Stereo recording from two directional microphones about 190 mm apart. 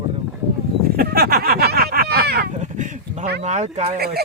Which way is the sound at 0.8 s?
50° right (ahead or behind).